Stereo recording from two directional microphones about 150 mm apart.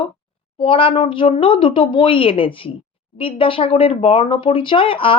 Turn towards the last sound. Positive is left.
turn(degrees=35)  # may be behind; listen again after turning